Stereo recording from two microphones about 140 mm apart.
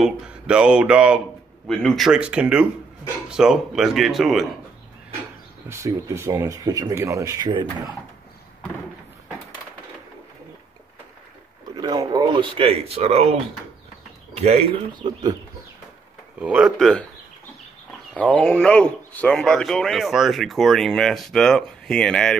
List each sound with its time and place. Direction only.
0.0 s mantra: 5° right (ahead or behind)
3.3 s speech: 5° right (ahead or behind)
5.7 s speech: 20° right (ahead or behind)
11.7 s speech: 30° right (ahead or behind); by 14.7 s 50° right (ahead or behind)
14.9 s speech: 30° right (ahead or behind)
16.3 s speech: 10° right (ahead or behind)
16.7 s speech: 5° left (ahead or behind)
18.1 s speech: 10° left (ahead or behind)